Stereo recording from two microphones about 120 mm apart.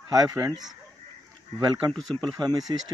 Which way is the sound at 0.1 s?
30° right (ahead or behind).